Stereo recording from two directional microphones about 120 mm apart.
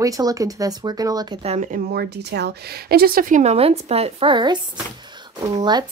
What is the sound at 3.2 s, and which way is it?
Speech, 90° right.